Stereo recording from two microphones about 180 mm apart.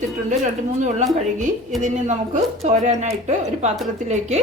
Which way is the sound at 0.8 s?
40° right (ahead or behind).